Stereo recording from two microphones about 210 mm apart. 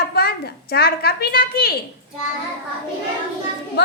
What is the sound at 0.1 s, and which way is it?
A woman's voice, 50° left (ahead or behind).